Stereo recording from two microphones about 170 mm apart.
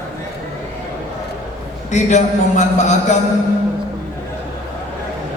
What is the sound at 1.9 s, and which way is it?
A man's voice, 45° left (ahead or behind).